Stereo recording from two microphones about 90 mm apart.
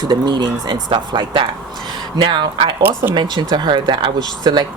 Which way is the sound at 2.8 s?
20° right (ahead or behind).